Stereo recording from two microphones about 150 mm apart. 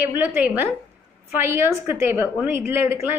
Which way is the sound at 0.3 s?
15° right (ahead or behind).